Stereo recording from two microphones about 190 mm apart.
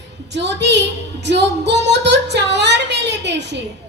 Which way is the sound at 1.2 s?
65° right (ahead or behind).